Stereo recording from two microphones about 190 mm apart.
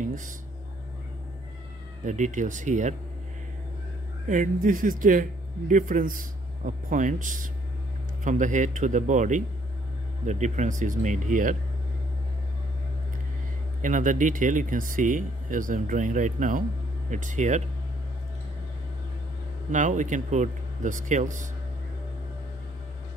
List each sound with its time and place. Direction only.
0.0 s a sound: 40° right (ahead or behind)
2.0 s speech: 40° right (ahead or behind)
4.3 s speech: 45° right (ahead or behind)
13.7 s speech: 45° right (ahead or behind)
19.7 s speech: 40° right (ahead or behind)